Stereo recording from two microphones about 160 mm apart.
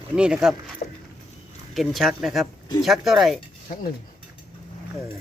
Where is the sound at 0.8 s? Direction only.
50° left (ahead or behind).